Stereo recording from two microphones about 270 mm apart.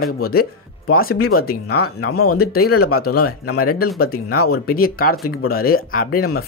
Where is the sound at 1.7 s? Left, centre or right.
Left.